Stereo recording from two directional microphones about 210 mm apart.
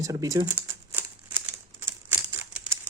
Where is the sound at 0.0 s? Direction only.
15° right (ahead or behind).